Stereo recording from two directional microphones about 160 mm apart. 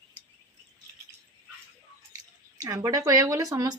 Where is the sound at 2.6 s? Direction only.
20° right (ahead or behind).